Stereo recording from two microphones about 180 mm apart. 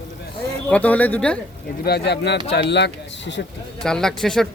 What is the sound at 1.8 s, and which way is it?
Speech, 65° left (ahead or behind).